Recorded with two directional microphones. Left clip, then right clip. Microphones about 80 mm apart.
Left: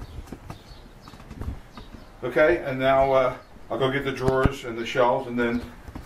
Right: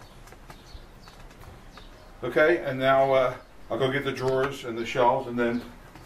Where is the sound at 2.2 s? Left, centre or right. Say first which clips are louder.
Left 2 dB; centre.